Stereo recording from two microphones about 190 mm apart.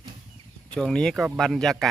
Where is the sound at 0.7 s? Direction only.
5° left (ahead or behind).